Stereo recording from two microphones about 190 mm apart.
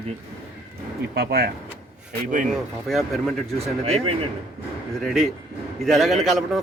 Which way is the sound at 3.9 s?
30° right (ahead or behind).